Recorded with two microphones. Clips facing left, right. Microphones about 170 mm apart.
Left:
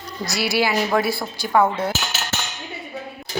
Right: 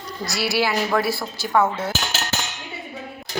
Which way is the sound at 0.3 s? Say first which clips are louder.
Left 1 dB; centre (ahead or behind).